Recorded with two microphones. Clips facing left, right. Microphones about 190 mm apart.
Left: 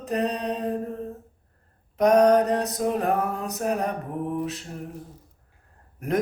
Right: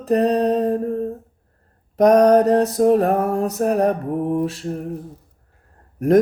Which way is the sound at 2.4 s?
40° right (ahead or behind).